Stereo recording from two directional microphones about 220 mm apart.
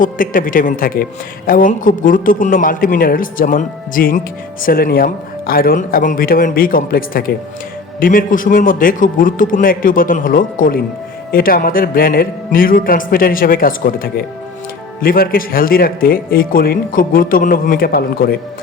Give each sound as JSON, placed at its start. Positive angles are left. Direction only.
{"t": 0.0, "sound": "speech", "side_deg": 40}